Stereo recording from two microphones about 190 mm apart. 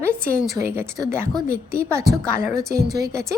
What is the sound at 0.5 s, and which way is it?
A woman's voice, 15° right (ahead or behind).